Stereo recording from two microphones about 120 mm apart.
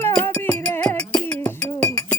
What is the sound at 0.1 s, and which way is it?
Music, 10° left (ahead or behind).